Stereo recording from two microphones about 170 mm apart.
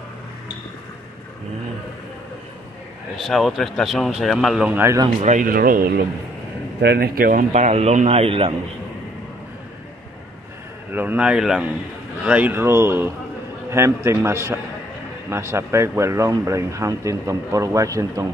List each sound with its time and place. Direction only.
3.2 s a man's voice: centre (ahead or behind)
5.2 s speech: 50° right (ahead or behind)
6.8 s speech: 75° right (ahead or behind)
7.5 s speech: 40° right (ahead or behind)
10.9 s speech: 10° right (ahead or behind)